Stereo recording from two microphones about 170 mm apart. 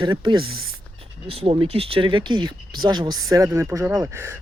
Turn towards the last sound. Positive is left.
turn(degrees=-15)  # may be behind; listen again after turning